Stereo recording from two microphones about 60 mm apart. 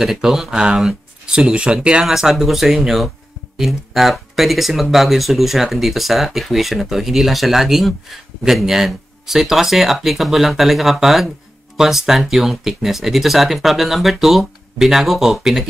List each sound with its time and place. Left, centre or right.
0.0 s speech: centre
0.7 s a sound: centre
1.3 s speech: centre